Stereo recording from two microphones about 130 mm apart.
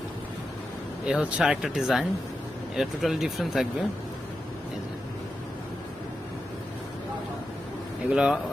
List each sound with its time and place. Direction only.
1.0 s speech: 5° right (ahead or behind)
8.1 s speech: 5° right (ahead or behind)